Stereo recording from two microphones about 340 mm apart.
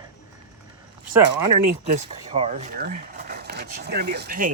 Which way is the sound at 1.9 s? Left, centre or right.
Centre.